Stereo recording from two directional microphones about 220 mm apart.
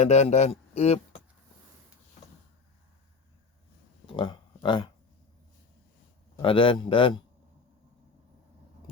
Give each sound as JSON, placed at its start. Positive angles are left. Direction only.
{"t": 0.0, "sound": "a man's voice", "side_deg": 30}
{"t": 4.0, "sound": "speech", "side_deg": 20}
{"t": 6.3, "sound": "a man's voice", "side_deg": 25}